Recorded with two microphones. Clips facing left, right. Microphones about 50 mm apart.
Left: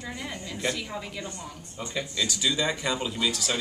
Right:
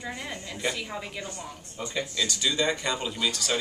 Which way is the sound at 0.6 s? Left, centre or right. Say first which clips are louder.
Left 1 dB; centre.